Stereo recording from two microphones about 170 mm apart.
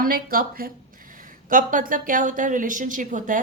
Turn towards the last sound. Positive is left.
turn(degrees=-50)  # may be behind; listen again after turning